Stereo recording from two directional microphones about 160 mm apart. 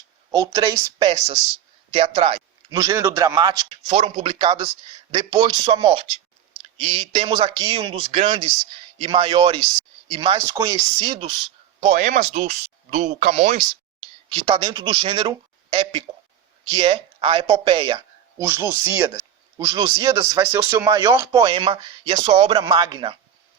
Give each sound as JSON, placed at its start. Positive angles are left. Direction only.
{"t": 0.3, "sound": "speech", "side_deg": -25}
{"t": 2.6, "sound": "speech", "side_deg": -20}
{"t": 3.9, "sound": "speech", "side_deg": -35}
{"t": 11.8, "sound": "speech", "side_deg": -50}
{"t": 18.4, "sound": "speech", "side_deg": -15}
{"t": 19.5, "sound": "speech", "side_deg": -25}
{"t": 22.5, "sound": "speech", "side_deg": -25}